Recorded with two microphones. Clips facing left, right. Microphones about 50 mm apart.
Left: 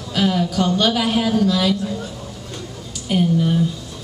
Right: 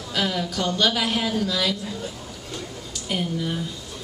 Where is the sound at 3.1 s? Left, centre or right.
Centre.